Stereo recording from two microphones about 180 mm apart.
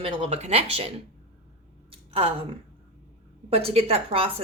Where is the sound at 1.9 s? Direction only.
30° right (ahead or behind).